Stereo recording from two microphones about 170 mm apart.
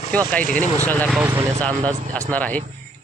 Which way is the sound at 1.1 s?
10° right (ahead or behind).